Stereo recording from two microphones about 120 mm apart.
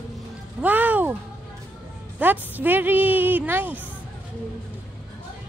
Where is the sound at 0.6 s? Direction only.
15° right (ahead or behind).